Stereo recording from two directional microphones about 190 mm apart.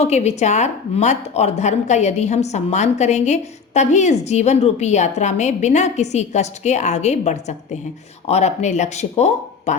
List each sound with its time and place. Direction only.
0.0 s speech: 35° left (ahead or behind)